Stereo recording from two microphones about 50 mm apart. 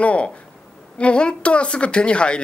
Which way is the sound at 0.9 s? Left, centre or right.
Left.